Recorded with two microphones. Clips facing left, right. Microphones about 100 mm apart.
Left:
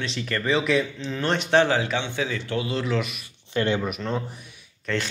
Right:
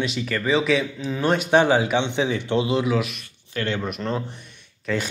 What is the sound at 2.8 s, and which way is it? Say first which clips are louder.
Speech: right 3 dB; 5° right (ahead or behind).